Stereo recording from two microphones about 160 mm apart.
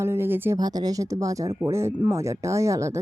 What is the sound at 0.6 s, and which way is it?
Speech, 25° right (ahead or behind).